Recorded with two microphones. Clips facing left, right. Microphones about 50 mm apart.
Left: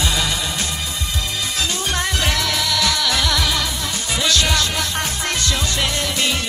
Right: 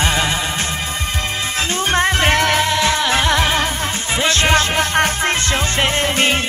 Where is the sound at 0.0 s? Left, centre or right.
Right.